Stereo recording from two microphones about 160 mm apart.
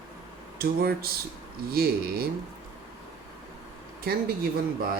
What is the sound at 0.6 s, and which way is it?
Speech, 70° right (ahead or behind).